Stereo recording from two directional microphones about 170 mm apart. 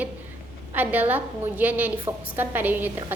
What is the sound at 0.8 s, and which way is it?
A woman's voice, 10° right (ahead or behind).